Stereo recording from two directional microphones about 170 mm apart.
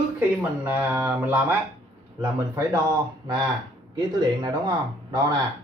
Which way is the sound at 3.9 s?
20° right (ahead or behind).